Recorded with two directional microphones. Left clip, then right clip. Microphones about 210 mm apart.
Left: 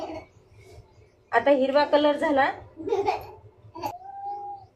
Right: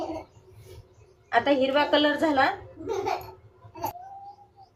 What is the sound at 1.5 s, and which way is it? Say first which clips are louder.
A woman's voice: left 3 dB; 15° left (ahead or behind).